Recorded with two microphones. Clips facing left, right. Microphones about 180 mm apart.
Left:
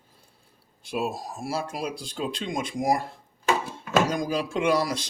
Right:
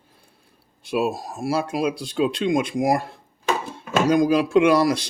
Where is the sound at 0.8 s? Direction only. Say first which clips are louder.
Right 6 dB; 70° right (ahead or behind).